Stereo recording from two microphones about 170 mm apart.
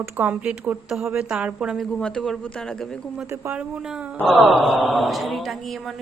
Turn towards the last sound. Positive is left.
turn(degrees=0)  # may be behind; listen again after turning